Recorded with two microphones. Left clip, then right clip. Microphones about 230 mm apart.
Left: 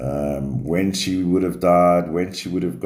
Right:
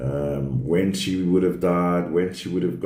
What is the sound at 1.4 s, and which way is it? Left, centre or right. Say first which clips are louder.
Speech: left 6 dB; left.